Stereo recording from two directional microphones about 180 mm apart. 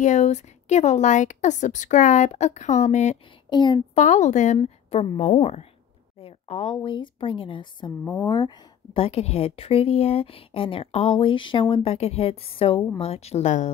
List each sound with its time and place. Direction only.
0.0 s a woman's voice: 40° left (ahead or behind)
3.4 s a woman's voice: 25° left (ahead or behind)
3.9 s a woman's voice: 40° left (ahead or behind)